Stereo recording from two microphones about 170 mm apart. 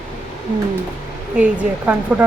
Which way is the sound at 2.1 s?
5° right (ahead or behind).